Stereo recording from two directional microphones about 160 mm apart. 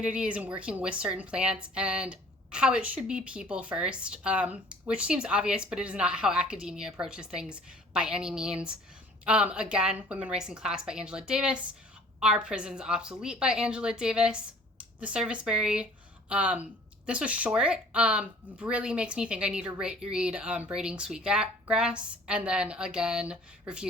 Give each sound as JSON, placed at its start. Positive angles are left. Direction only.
{"t": 0.0, "sound": "a woman's voice", "side_deg": -5}